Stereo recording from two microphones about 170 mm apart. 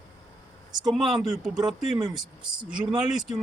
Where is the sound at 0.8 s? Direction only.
Centre (ahead or behind).